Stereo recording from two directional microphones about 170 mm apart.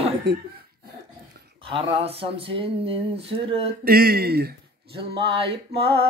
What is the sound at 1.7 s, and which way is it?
Speech, 35° right (ahead or behind).